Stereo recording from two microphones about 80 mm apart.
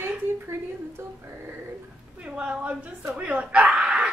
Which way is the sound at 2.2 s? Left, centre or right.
Centre.